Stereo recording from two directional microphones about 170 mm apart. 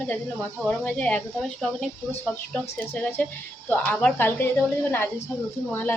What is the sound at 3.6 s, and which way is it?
Speech, 10° left (ahead or behind).